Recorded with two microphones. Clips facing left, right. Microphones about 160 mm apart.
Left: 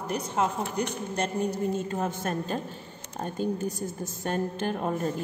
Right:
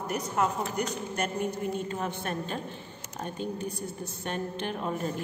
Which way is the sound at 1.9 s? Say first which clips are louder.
Left 3 dB; 40° left (ahead or behind).